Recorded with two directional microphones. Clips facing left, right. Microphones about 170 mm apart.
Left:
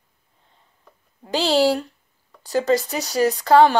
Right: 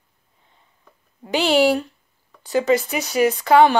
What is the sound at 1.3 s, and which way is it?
Speech, 35° left (ahead or behind).